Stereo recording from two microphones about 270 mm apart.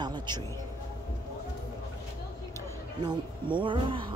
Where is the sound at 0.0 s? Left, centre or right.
Centre.